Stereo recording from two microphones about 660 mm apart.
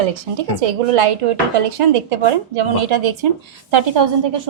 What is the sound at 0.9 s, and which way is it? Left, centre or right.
A woman's voice, right.